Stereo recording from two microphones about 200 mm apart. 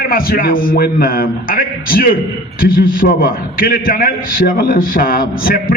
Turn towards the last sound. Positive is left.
turn(degrees=45)  # may be behind; listen again after turning